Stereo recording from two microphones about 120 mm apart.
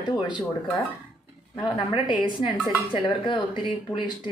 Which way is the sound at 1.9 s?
40° left (ahead or behind).